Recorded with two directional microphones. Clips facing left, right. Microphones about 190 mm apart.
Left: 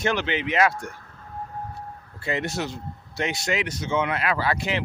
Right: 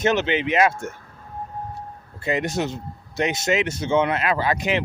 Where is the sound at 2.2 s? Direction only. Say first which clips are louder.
Right 4 dB; 20° right (ahead or behind).